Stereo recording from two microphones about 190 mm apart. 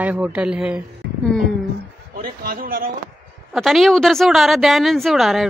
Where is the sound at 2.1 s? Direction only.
50° right (ahead or behind).